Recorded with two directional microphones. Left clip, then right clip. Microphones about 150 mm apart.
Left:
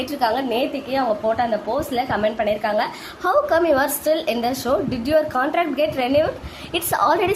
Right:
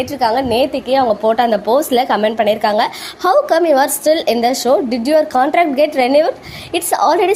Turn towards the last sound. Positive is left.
turn(degrees=-30)  # may be behind; listen again after turning